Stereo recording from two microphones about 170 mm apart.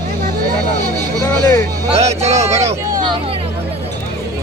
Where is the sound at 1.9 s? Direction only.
40° right (ahead or behind).